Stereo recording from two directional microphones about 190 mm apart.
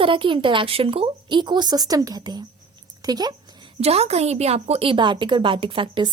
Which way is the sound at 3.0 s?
20° right (ahead or behind).